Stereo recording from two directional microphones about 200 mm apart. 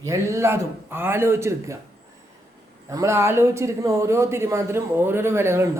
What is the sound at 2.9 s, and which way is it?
Speech, 15° right (ahead or behind).